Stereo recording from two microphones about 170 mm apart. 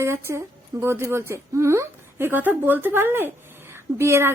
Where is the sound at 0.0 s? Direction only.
15° right (ahead or behind).